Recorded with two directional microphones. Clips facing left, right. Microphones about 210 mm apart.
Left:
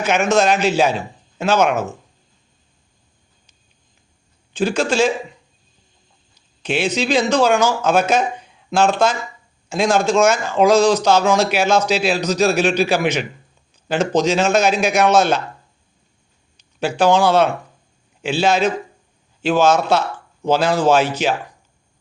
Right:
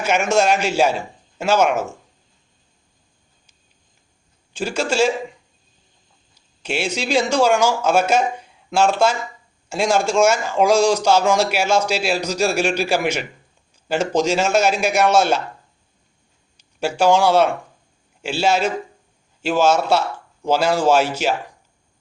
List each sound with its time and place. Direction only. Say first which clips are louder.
0.0 s speech: left 2 dB; 10° right (ahead or behind)
4.5 s speech: left 3 dB; 10° right (ahead or behind)
6.6 s speech: left 4 dB; 10° right (ahead or behind)
16.6 s speech: left 1 dB; 10° right (ahead or behind)